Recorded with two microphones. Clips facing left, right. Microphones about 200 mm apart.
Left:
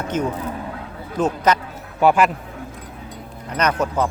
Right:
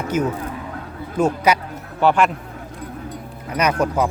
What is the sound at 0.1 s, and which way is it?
Speech, 10° right (ahead or behind).